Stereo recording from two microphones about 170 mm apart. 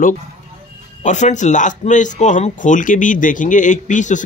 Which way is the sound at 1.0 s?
45° left (ahead or behind).